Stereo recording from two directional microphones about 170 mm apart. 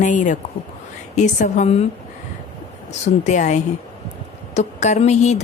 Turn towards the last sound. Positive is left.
turn(degrees=40)  # may be behind; listen again after turning